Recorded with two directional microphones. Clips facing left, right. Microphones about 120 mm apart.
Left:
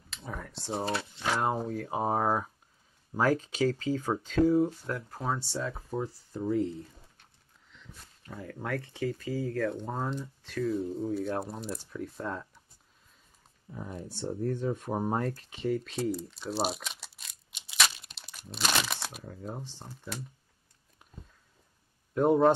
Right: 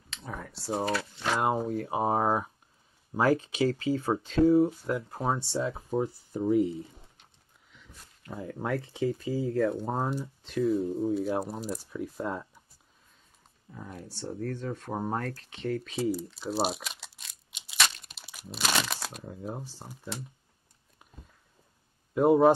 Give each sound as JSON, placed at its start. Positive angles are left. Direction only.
{"t": 0.1, "sound": "a sound", "side_deg": 0}
{"t": 1.3, "sound": "speech", "side_deg": -5}
{"t": 4.9, "sound": "speech", "side_deg": -25}
{"t": 7.7, "sound": "a sound", "side_deg": -5}
{"t": 8.3, "sound": "speech", "side_deg": -20}
{"t": 10.0, "sound": "speech", "side_deg": -15}
{"t": 10.9, "sound": "speech", "side_deg": -5}
{"t": 14.0, "sound": "speech", "side_deg": 15}
{"t": 19.2, "sound": "speech", "side_deg": -10}
{"t": 21.0, "sound": "a sound", "side_deg": 0}
{"t": 22.1, "sound": "speech", "side_deg": -5}